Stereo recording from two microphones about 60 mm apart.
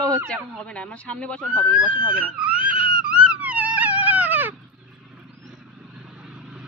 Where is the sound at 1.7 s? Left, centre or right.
Centre.